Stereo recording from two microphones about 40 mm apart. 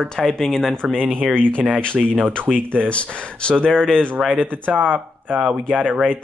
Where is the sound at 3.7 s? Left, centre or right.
Centre.